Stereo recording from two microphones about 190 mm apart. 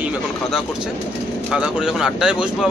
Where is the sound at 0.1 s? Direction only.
5° right (ahead or behind).